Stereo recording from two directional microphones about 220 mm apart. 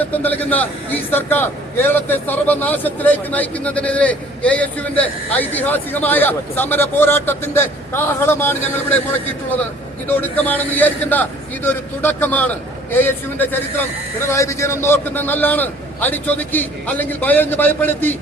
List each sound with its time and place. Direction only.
0.0 s a man's voice: 5° left (ahead or behind)